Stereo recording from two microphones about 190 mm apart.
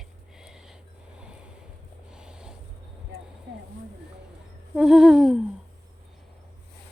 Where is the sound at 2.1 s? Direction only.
5° right (ahead or behind).